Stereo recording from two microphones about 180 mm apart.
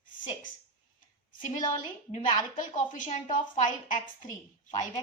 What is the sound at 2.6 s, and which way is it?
A woman's voice, 45° left (ahead or behind).